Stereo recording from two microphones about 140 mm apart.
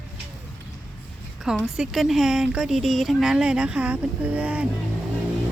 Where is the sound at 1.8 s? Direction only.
Centre (ahead or behind).